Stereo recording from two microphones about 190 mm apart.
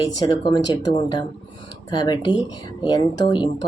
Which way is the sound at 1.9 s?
25° left (ahead or behind).